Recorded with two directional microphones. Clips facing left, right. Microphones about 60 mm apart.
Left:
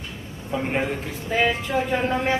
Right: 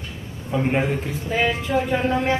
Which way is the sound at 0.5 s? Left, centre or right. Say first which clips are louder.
Right 3 dB; centre.